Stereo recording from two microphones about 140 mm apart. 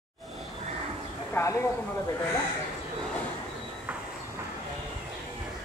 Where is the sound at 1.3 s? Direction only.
20° left (ahead or behind).